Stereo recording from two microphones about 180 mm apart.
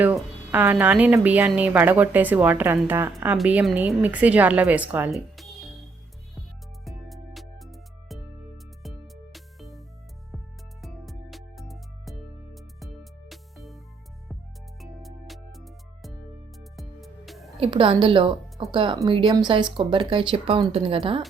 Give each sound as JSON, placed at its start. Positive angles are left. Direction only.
{"t": 0.0, "sound": "speech", "side_deg": -10}
{"t": 6.8, "sound": "music", "side_deg": 0}
{"t": 14.8, "sound": "music", "side_deg": 0}
{"t": 17.6, "sound": "speech", "side_deg": -30}